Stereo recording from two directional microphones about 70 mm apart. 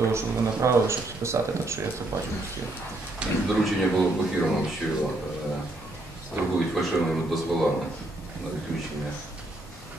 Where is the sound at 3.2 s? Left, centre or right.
Centre.